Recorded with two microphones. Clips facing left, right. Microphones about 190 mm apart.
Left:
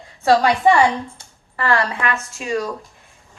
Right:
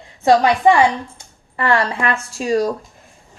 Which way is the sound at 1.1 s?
25° right (ahead or behind).